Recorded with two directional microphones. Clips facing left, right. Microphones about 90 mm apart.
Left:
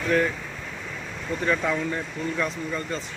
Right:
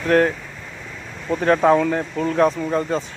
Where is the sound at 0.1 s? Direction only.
60° right (ahead or behind).